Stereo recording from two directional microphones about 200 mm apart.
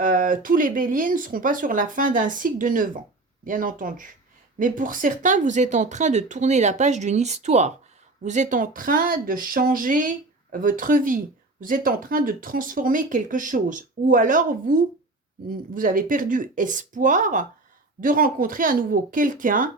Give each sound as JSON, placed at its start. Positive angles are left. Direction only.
{"t": 0.0, "sound": "speech", "side_deg": -45}